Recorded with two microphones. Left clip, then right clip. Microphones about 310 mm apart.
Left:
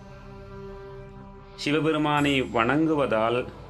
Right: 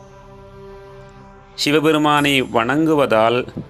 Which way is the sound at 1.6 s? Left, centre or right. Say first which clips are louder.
Right 9 dB; centre.